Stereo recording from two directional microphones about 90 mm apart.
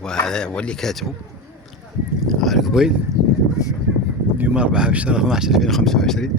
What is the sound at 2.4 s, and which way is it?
Speech, centre (ahead or behind).